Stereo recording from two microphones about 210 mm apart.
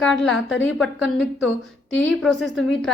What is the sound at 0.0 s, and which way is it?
A woman's voice, 5° left (ahead or behind).